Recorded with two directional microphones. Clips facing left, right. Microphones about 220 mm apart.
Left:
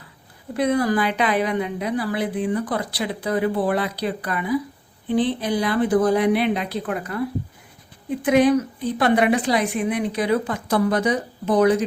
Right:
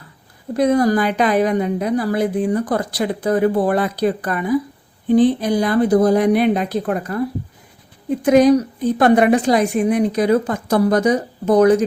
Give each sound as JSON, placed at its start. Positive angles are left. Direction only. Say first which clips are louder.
{"t": 0.5, "sound": "a woman's voice", "louder": "right 5 dB", "side_deg": -40}